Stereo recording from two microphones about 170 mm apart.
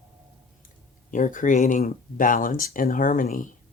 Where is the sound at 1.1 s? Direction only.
50° left (ahead or behind).